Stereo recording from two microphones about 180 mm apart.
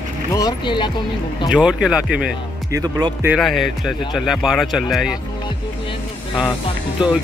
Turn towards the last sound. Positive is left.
turn(degrees=-5)  # may be behind; listen again after turning